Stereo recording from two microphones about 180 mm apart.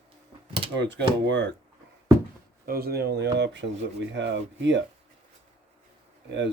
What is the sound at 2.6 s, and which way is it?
Speech, 55° right (ahead or behind).